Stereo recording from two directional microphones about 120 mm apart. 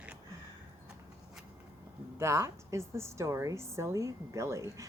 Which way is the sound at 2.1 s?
25° right (ahead or behind).